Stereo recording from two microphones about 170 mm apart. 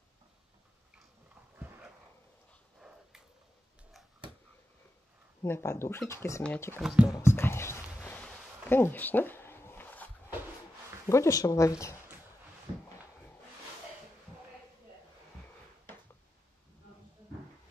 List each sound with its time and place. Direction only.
2.8 s a sound: centre (ahead or behind)
5.4 s speech: 15° left (ahead or behind)
6.8 s speech: 5° right (ahead or behind)
7.2 s speech: 15° left (ahead or behind)
8.0 s a sound: 10° left (ahead or behind)
11.1 s speech: 15° left (ahead or behind)